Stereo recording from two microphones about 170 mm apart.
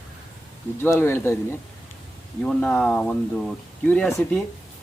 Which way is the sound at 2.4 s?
5° left (ahead or behind).